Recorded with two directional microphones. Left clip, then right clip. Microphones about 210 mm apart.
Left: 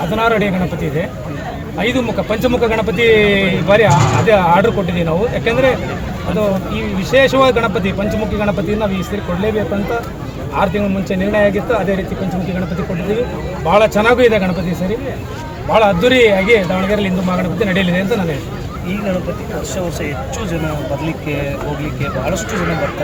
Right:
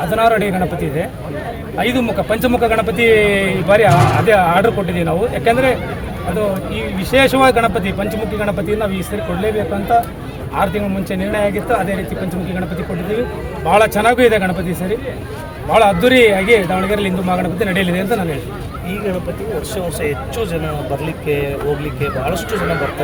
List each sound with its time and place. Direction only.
0.1 s speech: 15° right (ahead or behind)
1.8 s speech: 15° right (ahead or behind)
7.1 s speech: 15° right (ahead or behind)
11.1 s speech: 15° right (ahead or behind)
13.7 s speech: 15° right (ahead or behind)
15.7 s speech: 15° right (ahead or behind)